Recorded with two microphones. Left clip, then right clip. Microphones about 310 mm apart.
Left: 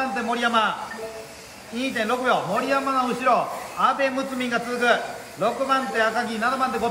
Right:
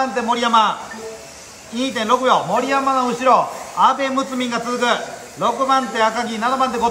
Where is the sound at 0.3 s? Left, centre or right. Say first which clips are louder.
Right 7 dB; right.